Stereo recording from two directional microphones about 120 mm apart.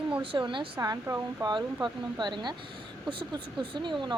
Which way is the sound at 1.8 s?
40° right (ahead or behind).